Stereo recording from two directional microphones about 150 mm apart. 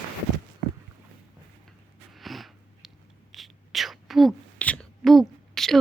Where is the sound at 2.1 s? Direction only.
Centre (ahead or behind).